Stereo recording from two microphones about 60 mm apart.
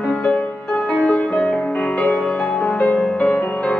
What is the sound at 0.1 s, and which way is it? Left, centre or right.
Music, centre.